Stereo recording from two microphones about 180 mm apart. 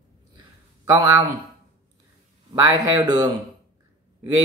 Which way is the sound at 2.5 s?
20° right (ahead or behind).